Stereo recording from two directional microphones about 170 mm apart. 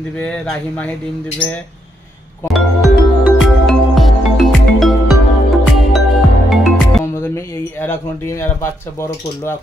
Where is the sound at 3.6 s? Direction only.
Centre (ahead or behind).